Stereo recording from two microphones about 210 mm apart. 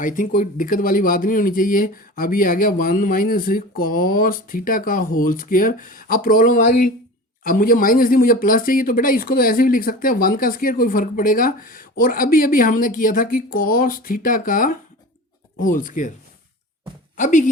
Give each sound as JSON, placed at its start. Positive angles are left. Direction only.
{"t": 0.0, "sound": "speech", "side_deg": 40}
{"t": 17.2, "sound": "speech", "side_deg": 35}